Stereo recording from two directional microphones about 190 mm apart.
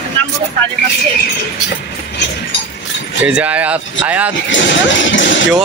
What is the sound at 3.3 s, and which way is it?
Speech, 5° right (ahead or behind).